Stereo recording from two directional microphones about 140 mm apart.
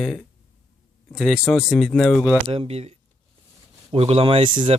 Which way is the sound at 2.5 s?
45° right (ahead or behind).